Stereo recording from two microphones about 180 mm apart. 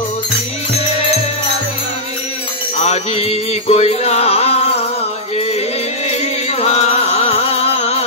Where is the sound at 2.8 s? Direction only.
35° left (ahead or behind).